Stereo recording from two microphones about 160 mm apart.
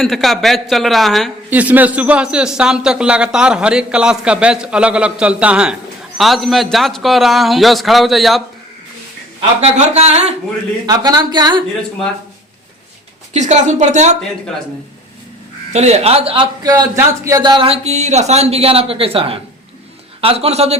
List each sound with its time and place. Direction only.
0.0 s a man's voice: centre (ahead or behind)
9.6 s a woman's voice: 45° right (ahead or behind)
10.8 s a woman's voice: 25° right (ahead or behind)
13.3 s a woman's voice: 45° right (ahead or behind)
15.7 s a man's voice: 45° right (ahead or behind)